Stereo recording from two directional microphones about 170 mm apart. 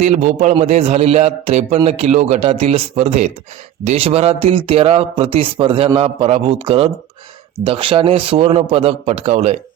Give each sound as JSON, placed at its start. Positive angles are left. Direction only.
{"t": 0.0, "sound": "a man's voice", "side_deg": -45}